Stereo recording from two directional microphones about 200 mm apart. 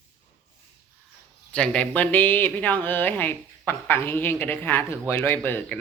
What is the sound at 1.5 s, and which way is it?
A woman's voice, 5° left (ahead or behind).